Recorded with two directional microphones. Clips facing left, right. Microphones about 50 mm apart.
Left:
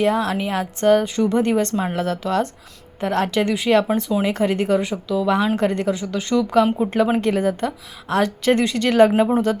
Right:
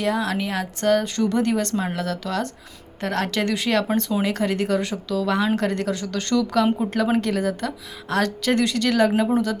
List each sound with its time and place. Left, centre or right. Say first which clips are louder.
0.0 s speech: left 4 dB; left
2.0 s speech: left 5 dB; left